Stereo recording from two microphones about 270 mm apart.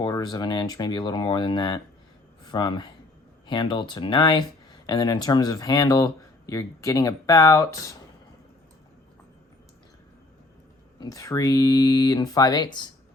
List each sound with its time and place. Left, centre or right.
0.0 s speech: centre
11.0 s speech: centre